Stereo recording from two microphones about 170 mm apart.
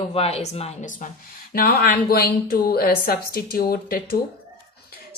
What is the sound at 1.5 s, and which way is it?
Speech, 60° left (ahead or behind).